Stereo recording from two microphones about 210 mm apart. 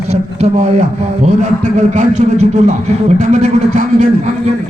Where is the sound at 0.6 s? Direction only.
35° right (ahead or behind).